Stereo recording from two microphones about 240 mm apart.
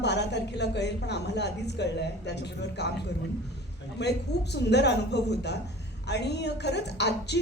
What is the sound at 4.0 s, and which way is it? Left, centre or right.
A woman's voice, left.